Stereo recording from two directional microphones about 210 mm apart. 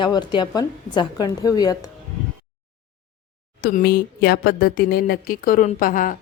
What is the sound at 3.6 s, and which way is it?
Speech, 45° left (ahead or behind).